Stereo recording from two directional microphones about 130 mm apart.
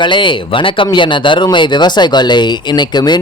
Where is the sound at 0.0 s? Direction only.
35° left (ahead or behind).